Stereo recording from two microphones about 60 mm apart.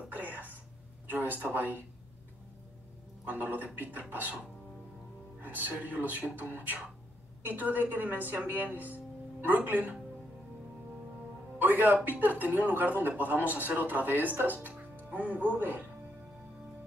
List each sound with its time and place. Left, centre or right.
0.1 s throat clearing: right
1.0 s a sound: right
1.5 s speech: right
3.3 s speech: right
11.5 s speech: right